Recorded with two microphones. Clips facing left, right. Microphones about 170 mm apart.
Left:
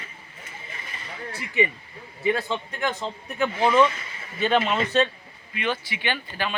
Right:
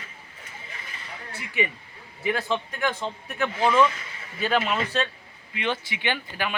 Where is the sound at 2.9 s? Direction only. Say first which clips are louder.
Even; 5° left (ahead or behind).